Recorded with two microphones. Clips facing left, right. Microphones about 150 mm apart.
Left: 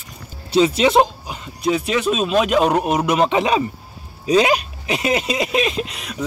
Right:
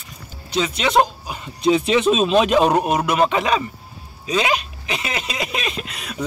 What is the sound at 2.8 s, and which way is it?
Speech, 15° left (ahead or behind).